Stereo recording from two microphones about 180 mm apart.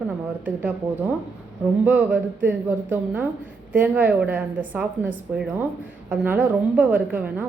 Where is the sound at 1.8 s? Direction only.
10° right (ahead or behind).